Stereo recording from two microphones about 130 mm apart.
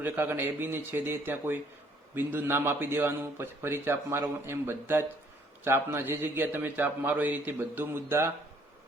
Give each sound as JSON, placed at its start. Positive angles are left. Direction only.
{"t": 0.0, "sound": "a man's voice", "side_deg": -15}